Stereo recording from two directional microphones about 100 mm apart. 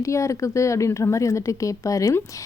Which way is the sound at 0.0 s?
30° left (ahead or behind).